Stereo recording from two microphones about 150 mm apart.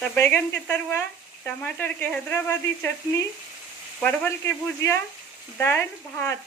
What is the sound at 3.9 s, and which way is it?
Speech, 10° left (ahead or behind).